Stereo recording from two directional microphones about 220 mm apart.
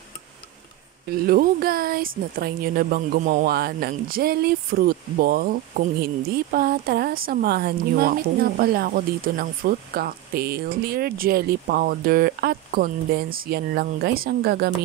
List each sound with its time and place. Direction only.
1.0 s speech: 45° right (ahead or behind)